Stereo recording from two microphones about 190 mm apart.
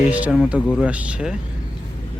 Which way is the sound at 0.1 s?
10° right (ahead or behind).